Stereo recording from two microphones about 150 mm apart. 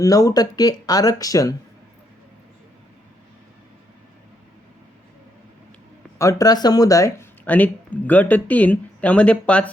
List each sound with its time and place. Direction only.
0.0 s speech: 25° left (ahead or behind)
6.1 s speech: 20° left (ahead or behind)